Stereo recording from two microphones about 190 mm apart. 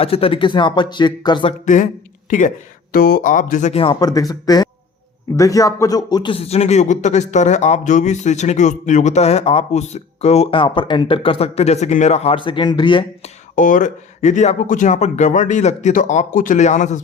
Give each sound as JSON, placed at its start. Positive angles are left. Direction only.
{"t": 0.0, "sound": "speech", "side_deg": 30}
{"t": 1.6, "sound": "a man's voice", "side_deg": 40}
{"t": 4.0, "sound": "a man's voice", "side_deg": 20}
{"t": 13.6, "sound": "a man's voice", "side_deg": 40}